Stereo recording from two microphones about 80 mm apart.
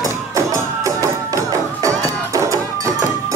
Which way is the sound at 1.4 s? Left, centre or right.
Right.